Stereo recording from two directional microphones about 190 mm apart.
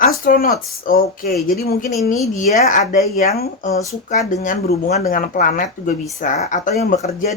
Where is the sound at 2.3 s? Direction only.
40° left (ahead or behind).